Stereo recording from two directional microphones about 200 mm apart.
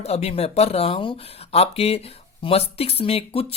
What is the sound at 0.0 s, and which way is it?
Speech, 30° left (ahead or behind).